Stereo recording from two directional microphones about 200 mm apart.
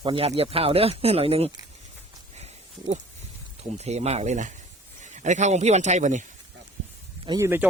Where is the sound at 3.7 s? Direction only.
35° right (ahead or behind).